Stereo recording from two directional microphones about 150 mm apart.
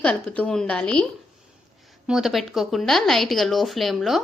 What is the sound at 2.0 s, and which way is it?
A woman's voice, centre (ahead or behind).